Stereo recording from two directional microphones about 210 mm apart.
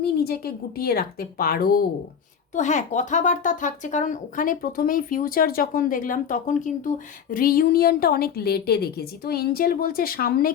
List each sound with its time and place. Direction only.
0.0 s speech: 45° left (ahead or behind)
2.6 s speech: 35° left (ahead or behind)